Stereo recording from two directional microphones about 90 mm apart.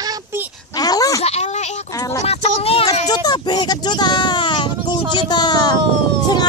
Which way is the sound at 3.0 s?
50° left (ahead or behind).